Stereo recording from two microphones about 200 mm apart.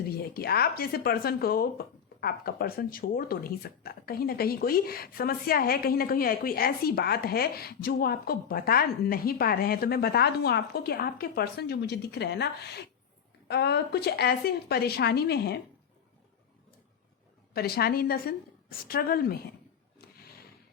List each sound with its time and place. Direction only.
0.1 s speech: 50° left (ahead or behind)
17.5 s speech: 50° left (ahead or behind)